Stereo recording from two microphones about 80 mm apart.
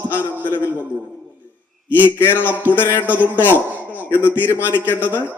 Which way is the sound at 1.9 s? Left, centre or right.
Left.